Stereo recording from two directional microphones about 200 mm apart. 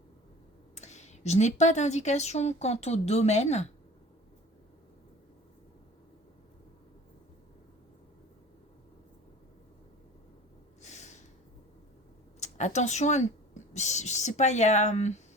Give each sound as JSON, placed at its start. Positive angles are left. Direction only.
{"t": 0.8, "sound": "a woman's voice", "side_deg": 35}
{"t": 10.8, "sound": "snort", "side_deg": 35}
{"t": 12.4, "sound": "speech", "side_deg": 35}